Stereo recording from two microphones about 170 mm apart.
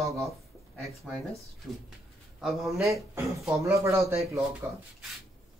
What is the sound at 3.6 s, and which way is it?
Speech, 15° right (ahead or behind).